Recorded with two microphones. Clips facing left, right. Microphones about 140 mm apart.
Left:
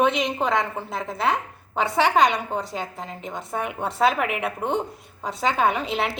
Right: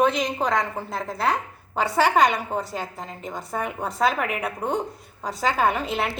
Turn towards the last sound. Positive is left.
turn(degrees=0)  # may be behind; listen again after turning